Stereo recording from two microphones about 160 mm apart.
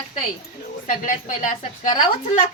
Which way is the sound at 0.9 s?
55° left (ahead or behind).